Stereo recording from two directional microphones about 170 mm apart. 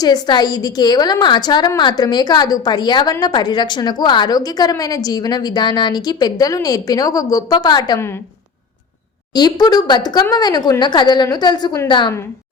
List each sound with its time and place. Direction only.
0.0 s a woman's voice: 25° left (ahead or behind)
9.3 s a woman's voice: 25° left (ahead or behind)